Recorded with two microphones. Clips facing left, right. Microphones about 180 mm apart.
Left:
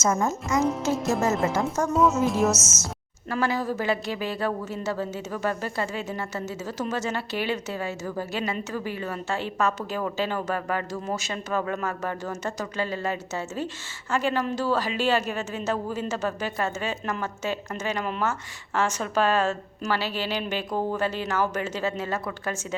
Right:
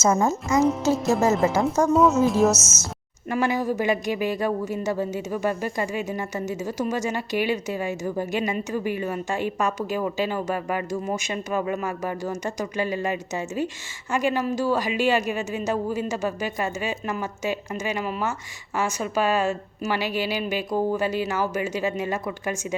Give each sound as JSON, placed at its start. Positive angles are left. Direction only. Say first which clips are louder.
{"t": 0.0, "sound": "speech", "louder": "right 4 dB", "side_deg": -25}
{"t": 1.0, "sound": "speech", "louder": "right 4 dB", "side_deg": 0}
{"t": 3.2, "sound": "speech", "louder": "right 3 dB", "side_deg": -15}